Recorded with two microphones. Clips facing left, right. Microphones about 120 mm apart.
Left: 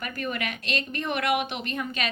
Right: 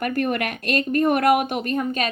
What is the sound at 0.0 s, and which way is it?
Speech, 55° right (ahead or behind).